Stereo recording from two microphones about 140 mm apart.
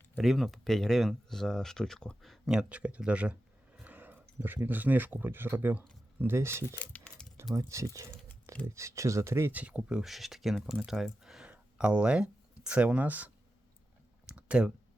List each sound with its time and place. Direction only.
0.2 s speech: centre (ahead or behind); by 6.7 s 20° right (ahead or behind)
6.7 s keys jangling: 10° left (ahead or behind)
7.7 s speech: 20° right (ahead or behind)
14.3 s clicking: 10° right (ahead or behind)